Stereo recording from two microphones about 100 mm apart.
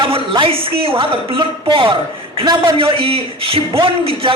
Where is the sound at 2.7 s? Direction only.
65° right (ahead or behind).